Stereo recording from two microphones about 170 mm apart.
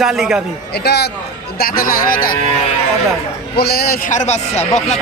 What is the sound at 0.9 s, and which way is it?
Speech, 75° left (ahead or behind).